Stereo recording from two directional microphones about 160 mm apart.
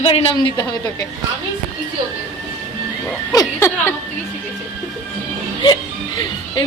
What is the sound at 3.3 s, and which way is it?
Speech, 20° left (ahead or behind).